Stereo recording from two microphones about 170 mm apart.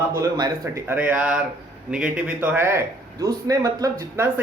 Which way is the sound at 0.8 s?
10° right (ahead or behind).